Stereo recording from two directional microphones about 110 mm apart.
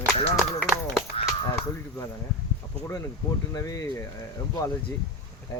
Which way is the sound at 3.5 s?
30° left (ahead or behind).